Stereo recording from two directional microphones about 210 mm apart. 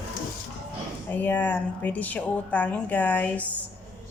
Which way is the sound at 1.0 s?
10° left (ahead or behind).